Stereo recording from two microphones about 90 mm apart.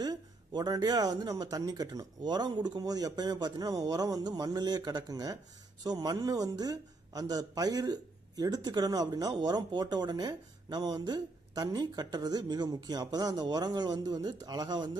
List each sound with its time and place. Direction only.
0.0 s speech: 50° right (ahead or behind)